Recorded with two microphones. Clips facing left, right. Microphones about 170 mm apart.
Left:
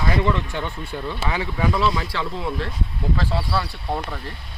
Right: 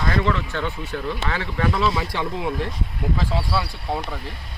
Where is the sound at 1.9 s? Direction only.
20° right (ahead or behind).